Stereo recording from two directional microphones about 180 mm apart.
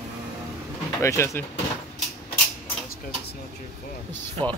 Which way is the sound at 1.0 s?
15° left (ahead or behind).